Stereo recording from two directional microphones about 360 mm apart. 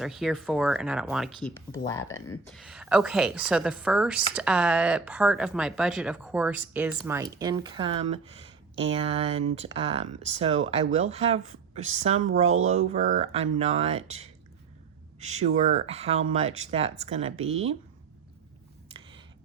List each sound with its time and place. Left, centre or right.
0.0 s a woman's voice: centre
15.3 s speech: centre